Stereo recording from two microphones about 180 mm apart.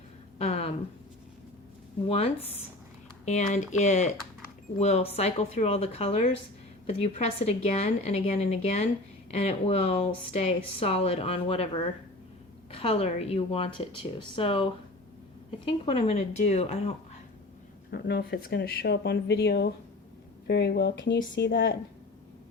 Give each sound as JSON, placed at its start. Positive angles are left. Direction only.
{"t": 0.3, "sound": "a sound", "side_deg": 35}
{"t": 2.0, "sound": "speech", "side_deg": 35}
{"t": 17.9, "sound": "speech", "side_deg": 65}